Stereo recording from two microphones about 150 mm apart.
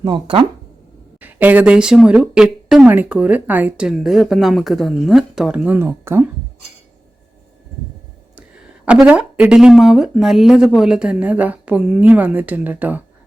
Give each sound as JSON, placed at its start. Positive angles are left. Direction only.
{"t": 0.0, "sound": "speech", "side_deg": -35}
{"t": 1.2, "sound": "speech", "side_deg": -10}
{"t": 8.4, "sound": "speech", "side_deg": -10}